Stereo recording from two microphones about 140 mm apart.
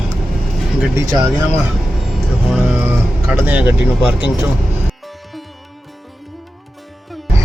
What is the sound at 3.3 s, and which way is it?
Speech, 10° right (ahead or behind).